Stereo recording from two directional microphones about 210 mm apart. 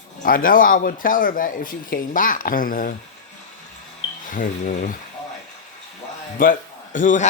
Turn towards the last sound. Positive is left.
turn(degrees=35)  # may be behind; listen again after turning